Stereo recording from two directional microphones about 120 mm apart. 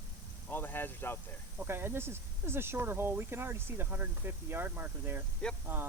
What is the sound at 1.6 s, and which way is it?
Speech, 20° right (ahead or behind).